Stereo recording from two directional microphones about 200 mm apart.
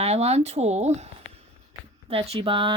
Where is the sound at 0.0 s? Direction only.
30° right (ahead or behind).